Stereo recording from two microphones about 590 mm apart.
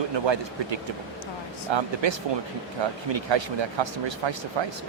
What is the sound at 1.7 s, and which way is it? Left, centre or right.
Speech, right.